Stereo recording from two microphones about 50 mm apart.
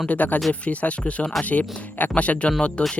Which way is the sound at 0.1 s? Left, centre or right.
Left.